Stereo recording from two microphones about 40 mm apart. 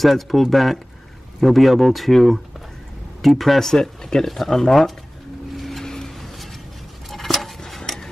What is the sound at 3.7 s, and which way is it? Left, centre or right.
Speech, centre.